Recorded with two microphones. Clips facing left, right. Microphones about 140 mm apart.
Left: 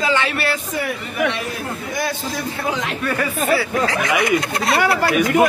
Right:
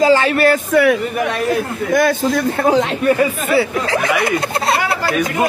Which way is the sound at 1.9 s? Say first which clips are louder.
Right 12 dB; 55° right (ahead or behind).